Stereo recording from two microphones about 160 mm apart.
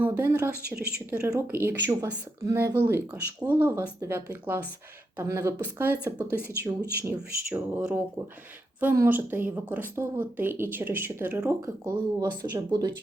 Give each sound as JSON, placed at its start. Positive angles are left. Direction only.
{"t": 0.0, "sound": "speech", "side_deg": -15}